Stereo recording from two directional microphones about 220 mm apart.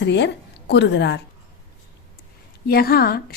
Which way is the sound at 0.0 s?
50° left (ahead or behind).